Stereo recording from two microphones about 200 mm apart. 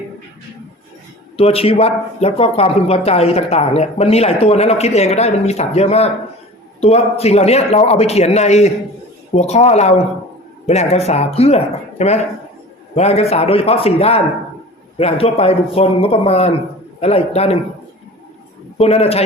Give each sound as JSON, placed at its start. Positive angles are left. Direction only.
{"t": 1.4, "sound": "speech", "side_deg": 30}
{"t": 18.8, "sound": "speech", "side_deg": 30}